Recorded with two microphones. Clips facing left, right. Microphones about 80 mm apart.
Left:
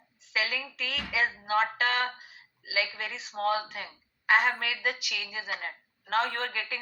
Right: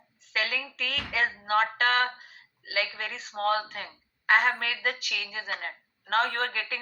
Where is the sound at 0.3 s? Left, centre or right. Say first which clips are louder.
Right 1 dB; right.